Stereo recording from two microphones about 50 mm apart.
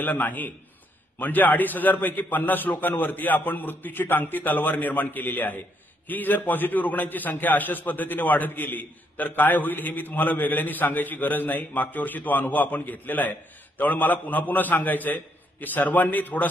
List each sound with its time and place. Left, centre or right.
0.0 s a man's voice: left